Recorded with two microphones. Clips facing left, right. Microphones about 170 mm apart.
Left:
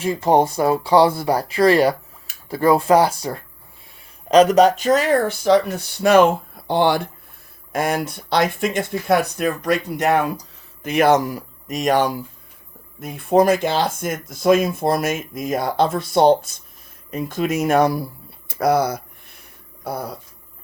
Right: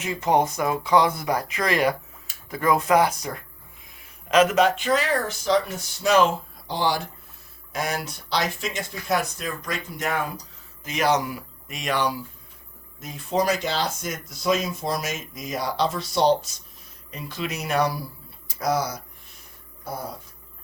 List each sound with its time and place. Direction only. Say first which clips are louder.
0.0 s speech: left 5 dB; 35° left (ahead or behind); by 10.3 s 70° left (ahead or behind)
10.8 s speech: left 7 dB; 55° left (ahead or behind)
13.0 s speech: left 9 dB; 60° left (ahead or behind)
18.4 s a sound: left 7 dB; 60° left (ahead or behind)